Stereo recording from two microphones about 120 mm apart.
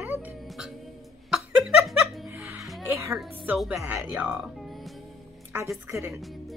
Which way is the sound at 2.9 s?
25° right (ahead or behind).